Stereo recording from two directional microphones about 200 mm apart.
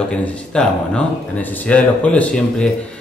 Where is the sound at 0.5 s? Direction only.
5° left (ahead or behind).